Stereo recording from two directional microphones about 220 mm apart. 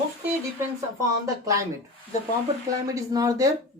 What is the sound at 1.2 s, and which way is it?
Speech, 15° right (ahead or behind).